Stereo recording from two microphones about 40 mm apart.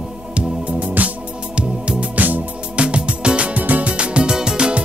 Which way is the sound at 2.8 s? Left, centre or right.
Right.